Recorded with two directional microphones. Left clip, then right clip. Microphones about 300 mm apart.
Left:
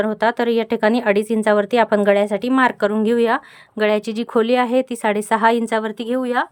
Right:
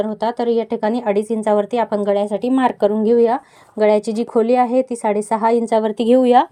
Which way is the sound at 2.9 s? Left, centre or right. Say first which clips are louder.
Right 3 dB; left.